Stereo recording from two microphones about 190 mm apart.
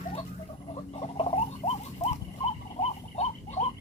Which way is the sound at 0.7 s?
30° left (ahead or behind).